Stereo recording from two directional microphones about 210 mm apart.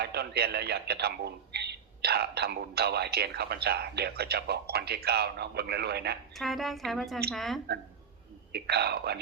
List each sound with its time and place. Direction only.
0.0 s a man's voice: 50° right (ahead or behind)
6.3 s speech: centre (ahead or behind)
8.5 s a man's voice: 50° right (ahead or behind)